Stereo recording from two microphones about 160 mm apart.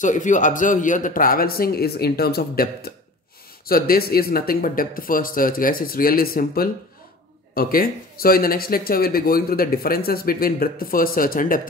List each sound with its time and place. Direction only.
0.0 s speech: 50° left (ahead or behind)